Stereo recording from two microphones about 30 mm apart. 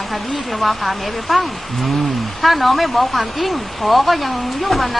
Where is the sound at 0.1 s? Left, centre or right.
Centre.